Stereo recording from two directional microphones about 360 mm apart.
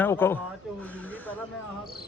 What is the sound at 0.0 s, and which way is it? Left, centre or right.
Speech, centre.